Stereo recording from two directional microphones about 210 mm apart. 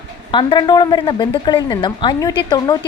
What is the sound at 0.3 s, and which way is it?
A woman's voice, 20° left (ahead or behind).